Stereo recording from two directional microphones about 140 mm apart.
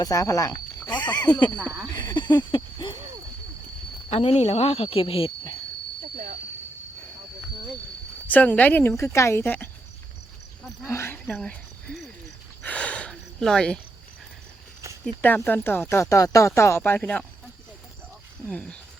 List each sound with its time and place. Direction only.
0.0 s speech: 25° left (ahead or behind)
2.0 s a sound: 30° left (ahead or behind)
4.1 s speech: 45° left (ahead or behind)
8.3 s speech: 10° left (ahead or behind)
10.8 s a sound: 20° left (ahead or behind)
11.3 s speech: centre (ahead or behind)
12.6 s a sound: 10° left (ahead or behind)
15.0 s speech: 10° left (ahead or behind)
18.4 s speech: 10° left (ahead or behind)